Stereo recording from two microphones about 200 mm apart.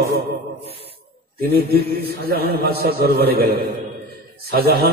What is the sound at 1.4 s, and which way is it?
A man's voice, 50° right (ahead or behind).